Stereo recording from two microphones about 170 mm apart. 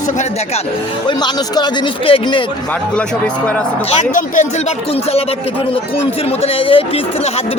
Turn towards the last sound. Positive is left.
turn(degrees=30)  # may be behind; listen again after turning